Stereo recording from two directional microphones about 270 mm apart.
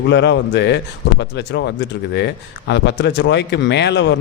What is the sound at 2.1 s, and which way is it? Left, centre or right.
Speech, left.